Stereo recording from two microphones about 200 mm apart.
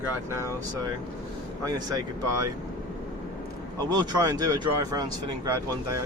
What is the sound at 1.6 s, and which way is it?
Speech, 20° right (ahead or behind).